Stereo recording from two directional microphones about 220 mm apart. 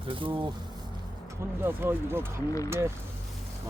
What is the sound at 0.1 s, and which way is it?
Speech, 20° right (ahead or behind).